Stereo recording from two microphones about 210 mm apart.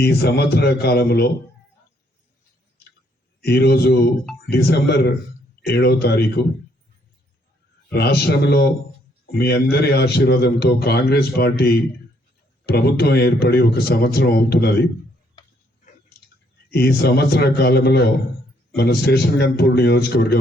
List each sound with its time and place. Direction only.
0.0 s a man's voice: 50° left (ahead or behind)
3.4 s a man's voice: 50° left (ahead or behind)
7.9 s a man's voice: 50° left (ahead or behind)
16.7 s a man's voice: 50° left (ahead or behind)